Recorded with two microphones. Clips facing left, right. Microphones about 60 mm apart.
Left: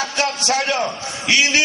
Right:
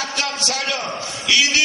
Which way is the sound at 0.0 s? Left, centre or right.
Left.